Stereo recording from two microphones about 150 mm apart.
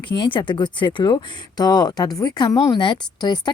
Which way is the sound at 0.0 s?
30° left (ahead or behind).